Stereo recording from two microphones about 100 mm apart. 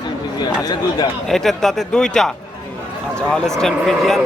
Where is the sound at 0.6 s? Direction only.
40° left (ahead or behind).